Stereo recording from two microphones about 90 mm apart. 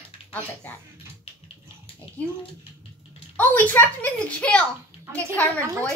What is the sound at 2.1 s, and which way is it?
Bathtub, 90° left.